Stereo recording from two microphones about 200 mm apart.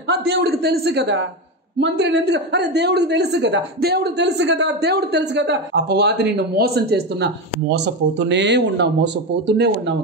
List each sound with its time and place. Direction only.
0.0 s speech: 60° right (ahead or behind)